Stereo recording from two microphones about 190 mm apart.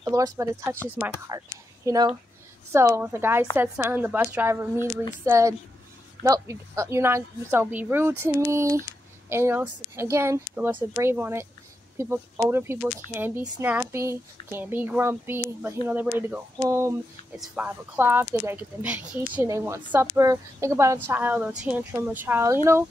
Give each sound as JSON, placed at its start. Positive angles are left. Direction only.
{"t": 0.0, "sound": "a woman's voice", "side_deg": -20}